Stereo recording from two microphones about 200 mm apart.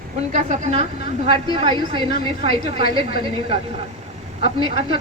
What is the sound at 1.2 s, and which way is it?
A woman's voice, 25° right (ahead or behind).